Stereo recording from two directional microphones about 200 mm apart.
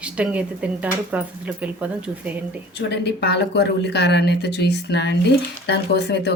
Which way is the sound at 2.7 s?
55° left (ahead or behind).